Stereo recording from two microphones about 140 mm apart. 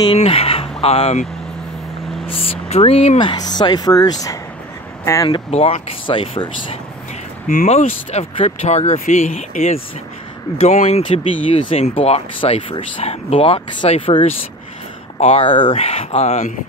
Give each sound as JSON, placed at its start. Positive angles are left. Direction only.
{"t": 0.1, "sound": "speech", "side_deg": 50}
{"t": 2.2, "sound": "speech", "side_deg": 45}
{"t": 5.3, "sound": "speech", "side_deg": 45}
{"t": 7.4, "sound": "speech", "side_deg": 55}
{"t": 11.5, "sound": "speech", "side_deg": 45}